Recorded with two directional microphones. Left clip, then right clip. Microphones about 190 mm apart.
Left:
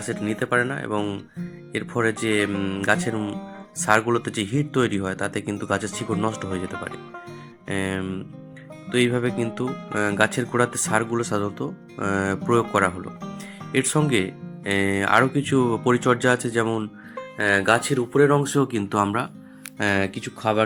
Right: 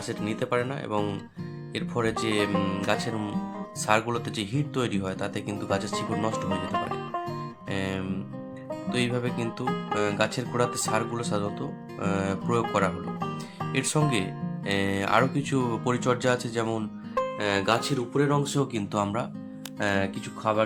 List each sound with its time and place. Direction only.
0.0 s speech: 5° left (ahead or behind)
19.8 s speech: 15° left (ahead or behind)